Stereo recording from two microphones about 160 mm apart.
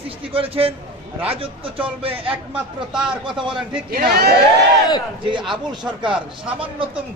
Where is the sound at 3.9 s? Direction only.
75° right (ahead or behind).